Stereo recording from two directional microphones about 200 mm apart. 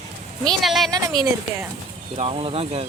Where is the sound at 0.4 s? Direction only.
Centre (ahead or behind).